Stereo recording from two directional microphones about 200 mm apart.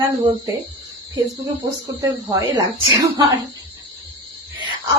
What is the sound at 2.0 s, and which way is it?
Speech, 20° right (ahead or behind).